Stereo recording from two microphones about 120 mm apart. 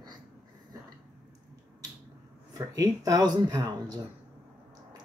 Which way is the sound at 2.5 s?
35° right (ahead or behind).